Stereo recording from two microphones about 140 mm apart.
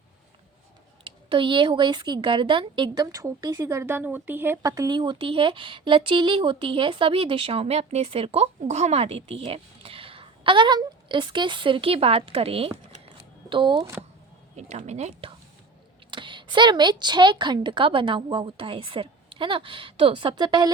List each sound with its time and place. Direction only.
1.0 s a woman's voice: 35° right (ahead or behind)
14.5 s a woman's voice: 55° right (ahead or behind)
16.0 s a woman's voice: 35° right (ahead or behind)